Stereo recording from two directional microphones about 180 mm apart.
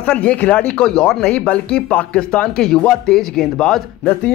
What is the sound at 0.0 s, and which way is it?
Speech, 5° left (ahead or behind).